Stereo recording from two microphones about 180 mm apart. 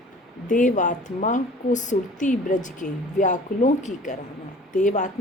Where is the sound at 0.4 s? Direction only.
45° left (ahead or behind).